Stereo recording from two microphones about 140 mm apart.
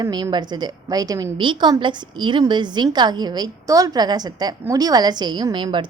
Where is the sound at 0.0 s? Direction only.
30° right (ahead or behind).